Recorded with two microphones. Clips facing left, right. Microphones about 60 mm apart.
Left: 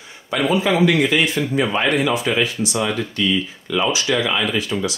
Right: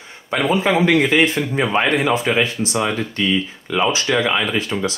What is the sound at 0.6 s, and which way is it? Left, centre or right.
Speech, right.